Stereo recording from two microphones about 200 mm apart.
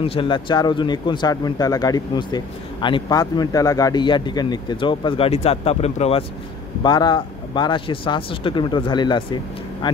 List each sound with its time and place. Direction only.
0.0 s speech: 25° left (ahead or behind)